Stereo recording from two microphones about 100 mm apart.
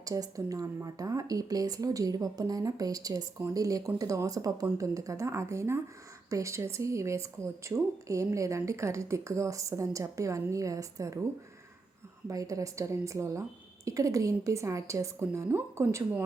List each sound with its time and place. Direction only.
0.0 s speech: 35° right (ahead or behind)
12.3 s speech: 35° right (ahead or behind)